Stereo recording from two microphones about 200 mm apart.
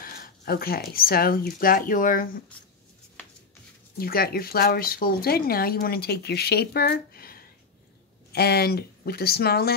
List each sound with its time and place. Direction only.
0.0 s a sound: 45° left (ahead or behind)
0.9 s speech: 50° left (ahead or behind)
4.0 s speech: 50° left (ahead or behind)